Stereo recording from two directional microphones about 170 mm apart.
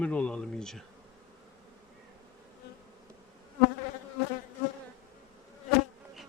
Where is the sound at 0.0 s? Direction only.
5° left (ahead or behind).